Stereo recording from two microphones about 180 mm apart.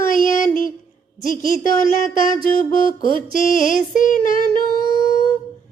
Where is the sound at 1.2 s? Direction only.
45° left (ahead or behind).